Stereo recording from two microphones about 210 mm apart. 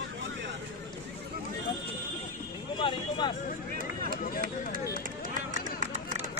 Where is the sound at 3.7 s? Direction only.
45° right (ahead or behind).